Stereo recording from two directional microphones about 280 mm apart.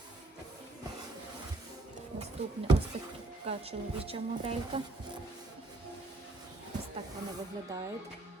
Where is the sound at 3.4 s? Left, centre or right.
Right.